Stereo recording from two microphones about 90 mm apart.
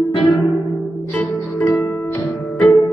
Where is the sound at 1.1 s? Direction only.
15° left (ahead or behind).